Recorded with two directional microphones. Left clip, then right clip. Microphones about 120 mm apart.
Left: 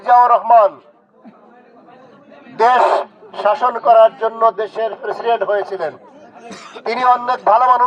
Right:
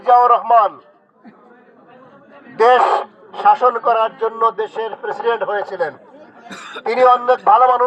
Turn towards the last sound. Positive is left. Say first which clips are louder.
# right 1 dB
turn(degrees=5)  # may be behind; listen again after turning